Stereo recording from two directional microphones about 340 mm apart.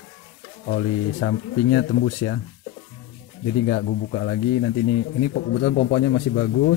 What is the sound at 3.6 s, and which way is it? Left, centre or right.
Speech, left.